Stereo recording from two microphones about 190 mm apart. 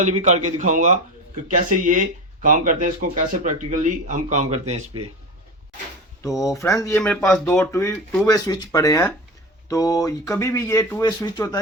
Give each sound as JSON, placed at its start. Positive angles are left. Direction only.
{"t": 0.0, "sound": "speech", "side_deg": -40}
{"t": 6.2, "sound": "speech", "side_deg": 15}